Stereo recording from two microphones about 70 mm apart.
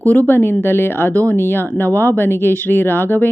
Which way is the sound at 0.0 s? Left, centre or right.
Left.